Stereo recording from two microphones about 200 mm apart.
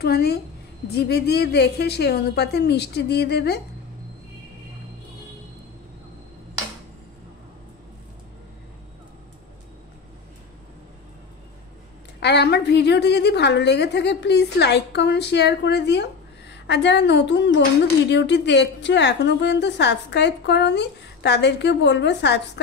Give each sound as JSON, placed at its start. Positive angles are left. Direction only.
{"t": 0.0, "sound": "a woman's voice", "side_deg": 50}
{"t": 12.2, "sound": "a woman's voice", "side_deg": 55}